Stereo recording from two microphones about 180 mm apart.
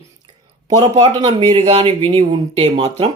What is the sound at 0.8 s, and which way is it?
Speech, 35° right (ahead or behind).